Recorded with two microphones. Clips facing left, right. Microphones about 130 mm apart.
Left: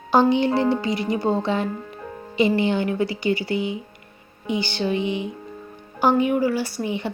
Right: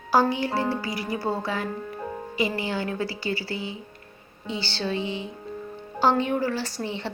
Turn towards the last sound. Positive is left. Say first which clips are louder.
# left 5 dB
turn(degrees=15)  # may be behind; listen again after turning